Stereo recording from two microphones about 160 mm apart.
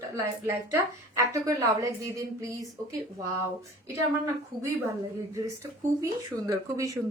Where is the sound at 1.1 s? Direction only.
20° right (ahead or behind).